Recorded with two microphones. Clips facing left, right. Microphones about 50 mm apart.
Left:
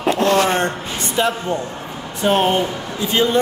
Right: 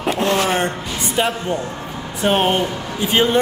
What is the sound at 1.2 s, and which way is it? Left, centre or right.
Speech, right.